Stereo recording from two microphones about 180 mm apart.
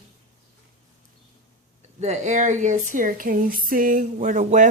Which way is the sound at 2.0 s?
40° right (ahead or behind).